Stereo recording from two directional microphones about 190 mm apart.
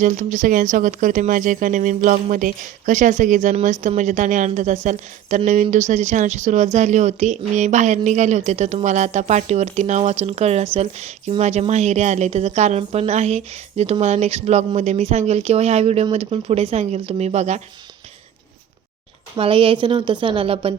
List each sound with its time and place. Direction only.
0.0 s speech: 40° right (ahead or behind)
19.4 s speech: 30° right (ahead or behind)